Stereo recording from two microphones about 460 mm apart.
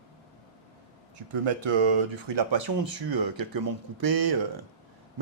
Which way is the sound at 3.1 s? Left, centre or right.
Right.